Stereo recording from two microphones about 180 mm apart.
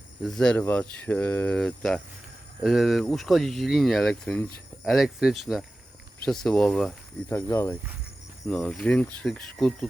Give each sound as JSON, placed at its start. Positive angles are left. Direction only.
{"t": 0.2, "sound": "speech", "side_deg": 5}